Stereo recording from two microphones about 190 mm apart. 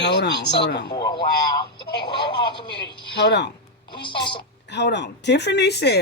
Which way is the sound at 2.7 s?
65° left (ahead or behind).